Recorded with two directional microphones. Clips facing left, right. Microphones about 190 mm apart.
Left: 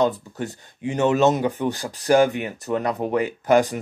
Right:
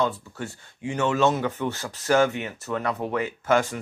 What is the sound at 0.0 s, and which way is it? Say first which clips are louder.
Speech: left 5 dB; 20° left (ahead or behind).